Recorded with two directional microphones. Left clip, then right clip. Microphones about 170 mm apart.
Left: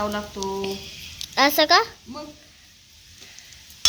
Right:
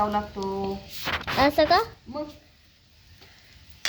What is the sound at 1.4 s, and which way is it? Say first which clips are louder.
Speech: left 3 dB; centre (ahead or behind).